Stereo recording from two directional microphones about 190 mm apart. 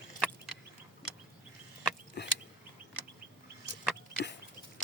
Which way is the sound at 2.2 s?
60° left (ahead or behind).